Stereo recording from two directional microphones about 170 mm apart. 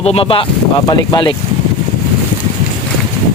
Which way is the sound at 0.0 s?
35° left (ahead or behind).